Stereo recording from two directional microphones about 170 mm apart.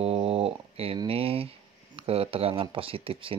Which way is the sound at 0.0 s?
35° right (ahead or behind).